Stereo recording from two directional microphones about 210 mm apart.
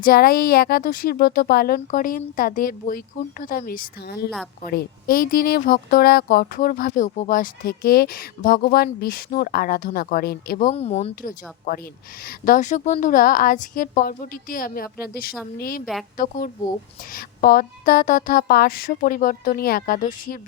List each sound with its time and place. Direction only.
0.0 s speech: 45° left (ahead or behind)
11.1 s a woman's voice: 40° left (ahead or behind)